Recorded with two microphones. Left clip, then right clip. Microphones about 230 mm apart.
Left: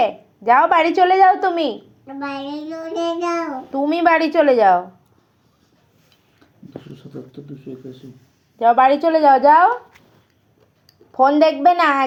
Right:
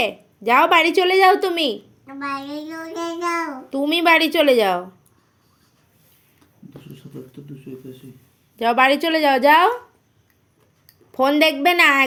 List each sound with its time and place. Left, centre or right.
0.0 s a woman's voice: right
2.0 s child singing: centre
3.8 s a woman's voice: right
8.5 s a woman's voice: right
9.0 s a woman's voice: right
11.1 s a woman's voice: right